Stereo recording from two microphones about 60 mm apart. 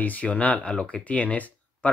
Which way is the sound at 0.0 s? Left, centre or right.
Left.